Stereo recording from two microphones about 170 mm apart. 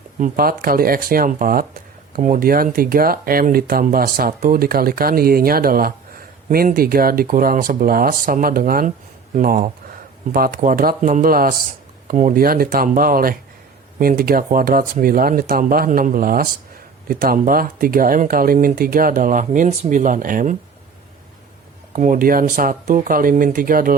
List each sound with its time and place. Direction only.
0.2 s speech: 60° right (ahead or behind)
21.9 s speech: 50° right (ahead or behind)